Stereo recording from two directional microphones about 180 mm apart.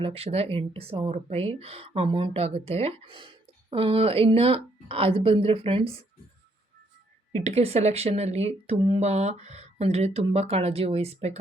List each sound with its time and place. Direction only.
0.0 s a woman's voice: 35° right (ahead or behind)
7.3 s a woman's voice: 35° right (ahead or behind)